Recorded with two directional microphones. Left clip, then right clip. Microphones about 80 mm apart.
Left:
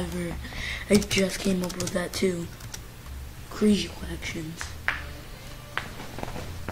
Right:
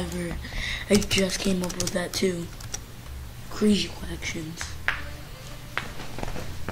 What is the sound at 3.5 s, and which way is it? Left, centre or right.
Speech, centre.